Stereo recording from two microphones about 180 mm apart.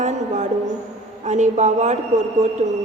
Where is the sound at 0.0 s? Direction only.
40° right (ahead or behind).